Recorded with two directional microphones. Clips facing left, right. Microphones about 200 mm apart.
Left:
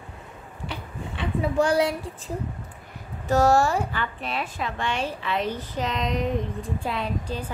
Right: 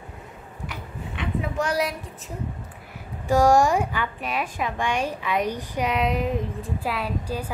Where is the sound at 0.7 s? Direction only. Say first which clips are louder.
Left 2 dB; 30° left (ahead or behind).